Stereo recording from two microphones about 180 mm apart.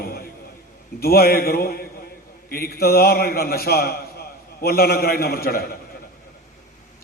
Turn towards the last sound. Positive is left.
turn(degrees=60)  # may be behind; listen again after turning